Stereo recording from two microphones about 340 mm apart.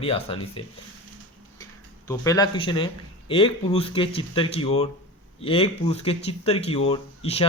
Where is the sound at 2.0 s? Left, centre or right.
Centre.